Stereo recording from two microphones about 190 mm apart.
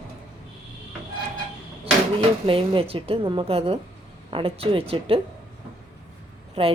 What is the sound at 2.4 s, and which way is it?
A woman's voice, 30° right (ahead or behind).